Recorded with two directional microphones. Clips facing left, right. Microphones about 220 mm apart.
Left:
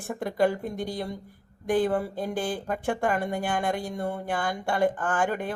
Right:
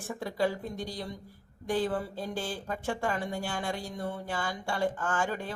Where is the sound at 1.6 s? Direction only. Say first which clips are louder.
Left 6 dB; 15° left (ahead or behind).